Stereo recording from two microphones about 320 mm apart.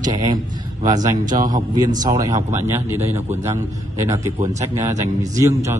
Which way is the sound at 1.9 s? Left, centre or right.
Centre.